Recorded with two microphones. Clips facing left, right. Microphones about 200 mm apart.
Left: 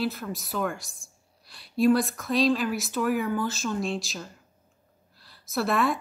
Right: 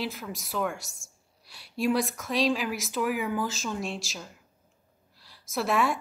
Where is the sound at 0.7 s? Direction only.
75° right (ahead or behind).